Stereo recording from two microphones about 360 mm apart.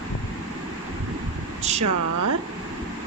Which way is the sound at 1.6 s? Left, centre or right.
Centre.